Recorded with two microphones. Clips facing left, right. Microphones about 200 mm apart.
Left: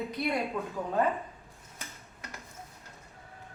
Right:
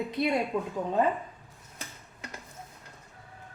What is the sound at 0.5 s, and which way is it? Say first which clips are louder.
Speech: right 4 dB; 15° right (ahead or behind).